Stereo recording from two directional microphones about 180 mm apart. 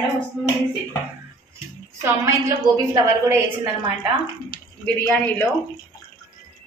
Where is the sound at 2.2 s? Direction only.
15° right (ahead or behind).